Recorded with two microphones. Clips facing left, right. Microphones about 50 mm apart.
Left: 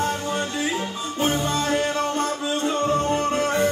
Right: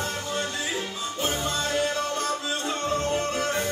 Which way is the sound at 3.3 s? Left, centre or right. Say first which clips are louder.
Left 6 dB; left.